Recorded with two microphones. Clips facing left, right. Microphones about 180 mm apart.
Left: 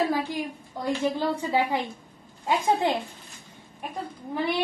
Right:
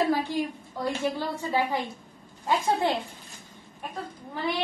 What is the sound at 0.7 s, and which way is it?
A woman's voice, 15° left (ahead or behind).